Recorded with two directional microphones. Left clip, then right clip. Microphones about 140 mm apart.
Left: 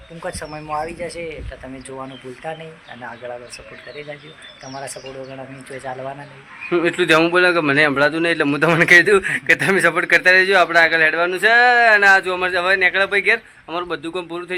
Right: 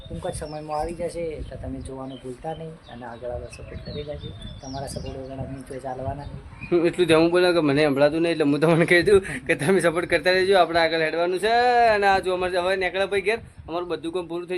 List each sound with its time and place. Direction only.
0.3 s speech: 30° right (ahead or behind)
6.7 s a man's voice: 5° right (ahead or behind)